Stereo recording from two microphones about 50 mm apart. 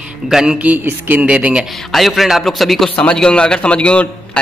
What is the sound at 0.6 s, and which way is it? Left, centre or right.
Speech, right.